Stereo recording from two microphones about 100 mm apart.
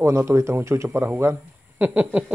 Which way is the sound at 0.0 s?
25° right (ahead or behind).